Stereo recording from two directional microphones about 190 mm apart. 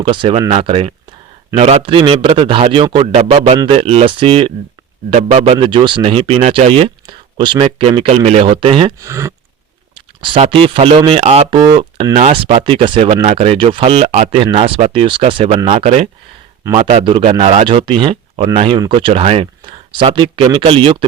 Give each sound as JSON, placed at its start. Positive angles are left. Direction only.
{"t": 0.0, "sound": "speech", "side_deg": -30}
{"t": 9.0, "sound": "speech", "side_deg": -15}
{"t": 10.2, "sound": "speech", "side_deg": -25}